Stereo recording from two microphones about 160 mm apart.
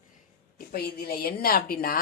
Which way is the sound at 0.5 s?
70° left (ahead or behind).